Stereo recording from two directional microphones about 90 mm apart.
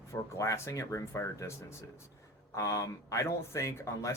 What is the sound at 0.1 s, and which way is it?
Speech, 35° left (ahead or behind).